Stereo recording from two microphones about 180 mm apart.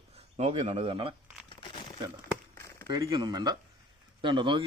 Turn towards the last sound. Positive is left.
turn(degrees=-25)  # may be behind; listen again after turning